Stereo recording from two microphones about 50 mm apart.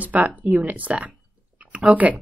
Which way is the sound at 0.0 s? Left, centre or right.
Right.